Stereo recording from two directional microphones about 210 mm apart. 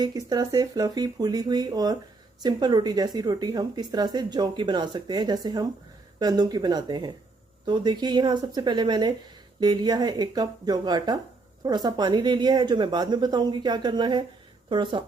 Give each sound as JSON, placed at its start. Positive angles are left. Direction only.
{"t": 0.0, "sound": "speech", "side_deg": -20}